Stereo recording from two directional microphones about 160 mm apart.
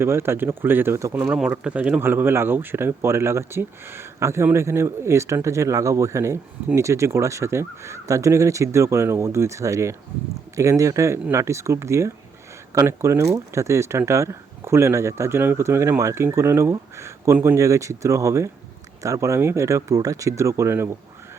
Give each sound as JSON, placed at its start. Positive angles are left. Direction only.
{"t": 0.0, "sound": "speech", "side_deg": -15}